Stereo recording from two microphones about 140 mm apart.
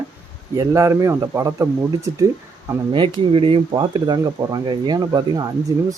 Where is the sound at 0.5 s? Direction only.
25° right (ahead or behind).